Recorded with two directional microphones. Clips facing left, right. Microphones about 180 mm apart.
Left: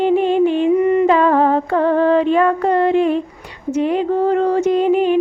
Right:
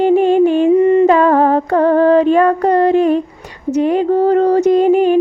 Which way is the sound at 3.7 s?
40° right (ahead or behind).